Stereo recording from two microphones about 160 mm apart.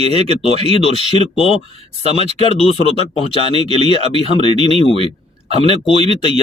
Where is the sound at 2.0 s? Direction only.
40° right (ahead or behind).